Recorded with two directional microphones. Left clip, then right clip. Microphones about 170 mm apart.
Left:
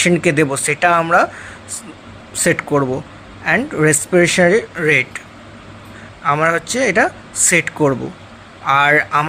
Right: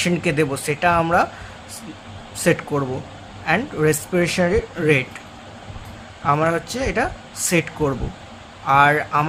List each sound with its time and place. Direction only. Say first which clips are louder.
0.0 s speech: left 6 dB; 35° left (ahead or behind)
2.4 s speech: left 4 dB; 40° left (ahead or behind)
6.2 s speech: left 4 dB; 40° left (ahead or behind)